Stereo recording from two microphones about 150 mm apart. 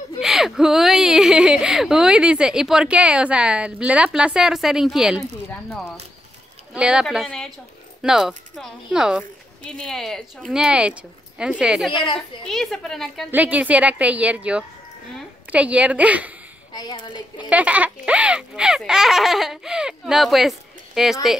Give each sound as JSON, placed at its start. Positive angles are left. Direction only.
{"t": 0.2, "sound": "speech", "side_deg": -5}
{"t": 6.7, "sound": "speech", "side_deg": -5}
{"t": 13.3, "sound": "a woman's voice", "side_deg": -10}
{"t": 16.7, "sound": "a woman's voice", "side_deg": 30}
{"t": 17.5, "sound": "speech", "side_deg": -10}